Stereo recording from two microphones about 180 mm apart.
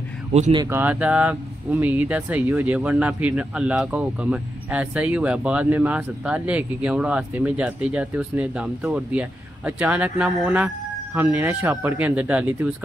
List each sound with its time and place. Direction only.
0.3 s speech: 35° right (ahead or behind)
0.6 s speech: 15° right (ahead or behind)